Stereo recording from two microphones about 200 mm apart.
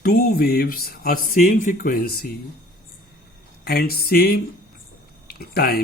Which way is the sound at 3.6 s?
50° left (ahead or behind).